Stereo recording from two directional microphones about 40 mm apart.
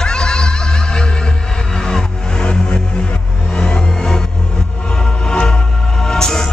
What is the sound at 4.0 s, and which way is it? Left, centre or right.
Music, centre.